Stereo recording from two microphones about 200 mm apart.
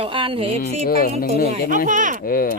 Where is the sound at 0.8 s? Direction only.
50° left (ahead or behind).